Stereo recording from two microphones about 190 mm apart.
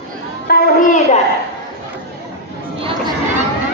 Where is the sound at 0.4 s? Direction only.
45° left (ahead or behind).